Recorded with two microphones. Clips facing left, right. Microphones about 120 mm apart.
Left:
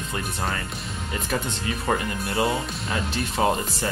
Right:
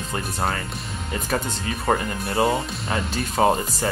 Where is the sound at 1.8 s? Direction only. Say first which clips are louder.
Right 3 dB; 35° right (ahead or behind).